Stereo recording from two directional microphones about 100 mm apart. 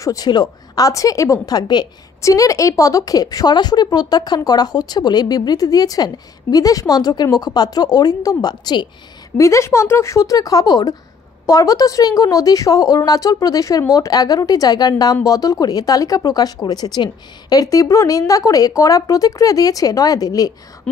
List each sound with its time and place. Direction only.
0.0 s a woman's voice: 35° left (ahead or behind)
2.2 s a woman's voice: 35° left (ahead or behind)
9.4 s a woman's voice: 30° left (ahead or behind)